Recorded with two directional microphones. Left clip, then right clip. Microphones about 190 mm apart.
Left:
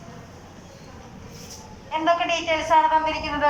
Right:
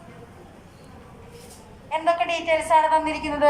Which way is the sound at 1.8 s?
20° right (ahead or behind).